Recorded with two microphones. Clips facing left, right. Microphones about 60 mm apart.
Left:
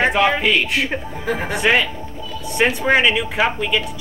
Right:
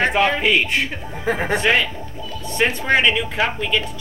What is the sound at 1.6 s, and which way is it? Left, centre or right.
A woman's voice, centre.